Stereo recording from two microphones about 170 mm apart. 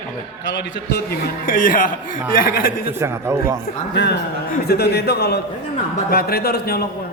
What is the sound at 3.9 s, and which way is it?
Speech, 90° left.